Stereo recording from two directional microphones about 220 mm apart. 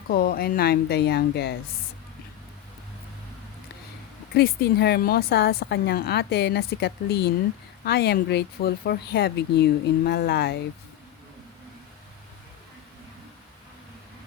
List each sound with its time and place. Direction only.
0.1 s a woman's voice: 45° left (ahead or behind)
4.4 s a woman's voice: 45° left (ahead or behind)